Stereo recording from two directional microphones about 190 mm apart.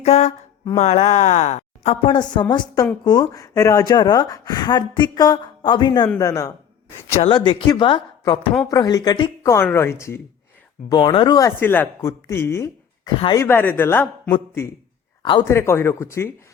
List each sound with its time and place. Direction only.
0.0 s speech: 35° left (ahead or behind); by 12.7 s 15° left (ahead or behind)
13.1 s speech: 25° left (ahead or behind)
13.4 s speech: 10° left (ahead or behind)
15.2 s speech: 25° left (ahead or behind)